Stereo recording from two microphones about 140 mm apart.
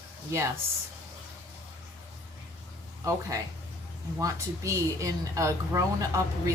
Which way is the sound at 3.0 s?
20° right (ahead or behind).